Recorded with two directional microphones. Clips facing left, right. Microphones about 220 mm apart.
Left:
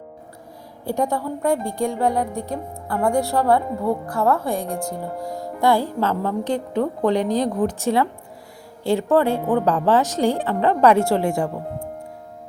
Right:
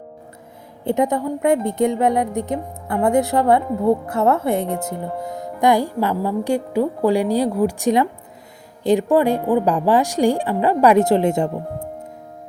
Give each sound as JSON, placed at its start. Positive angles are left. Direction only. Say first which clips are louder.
{"t": 0.9, "sound": "a woman's voice", "louder": "right 4 dB", "side_deg": -20}